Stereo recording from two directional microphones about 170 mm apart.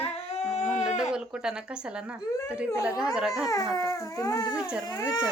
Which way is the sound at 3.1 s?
Centre (ahead or behind).